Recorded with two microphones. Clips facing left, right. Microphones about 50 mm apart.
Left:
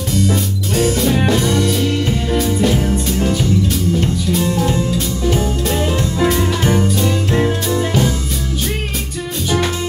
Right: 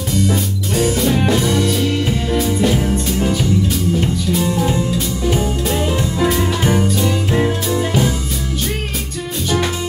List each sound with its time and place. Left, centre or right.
0.2 s music: centre